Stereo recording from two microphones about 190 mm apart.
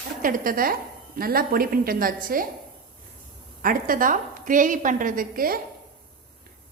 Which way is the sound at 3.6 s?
45° right (ahead or behind).